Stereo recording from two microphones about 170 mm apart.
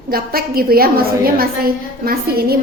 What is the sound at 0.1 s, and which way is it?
A woman's voice, 60° right (ahead or behind).